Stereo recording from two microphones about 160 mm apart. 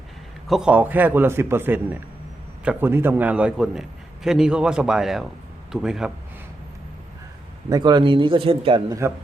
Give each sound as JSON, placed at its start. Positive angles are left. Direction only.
{"t": 0.4, "sound": "a man's voice", "side_deg": -5}
{"t": 7.7, "sound": "a man's voice", "side_deg": -25}